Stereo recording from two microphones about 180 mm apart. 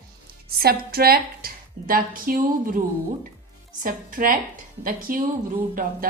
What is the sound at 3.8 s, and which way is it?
A woman's voice, 50° right (ahead or behind).